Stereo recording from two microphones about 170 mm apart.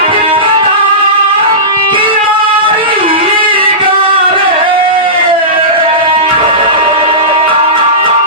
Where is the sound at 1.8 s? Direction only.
30° right (ahead or behind).